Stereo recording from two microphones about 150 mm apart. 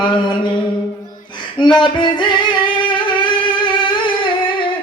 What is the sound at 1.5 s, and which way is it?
Singing, 30° left (ahead or behind).